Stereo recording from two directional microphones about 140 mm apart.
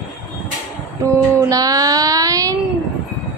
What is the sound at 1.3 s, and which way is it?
Speech, 25° right (ahead or behind).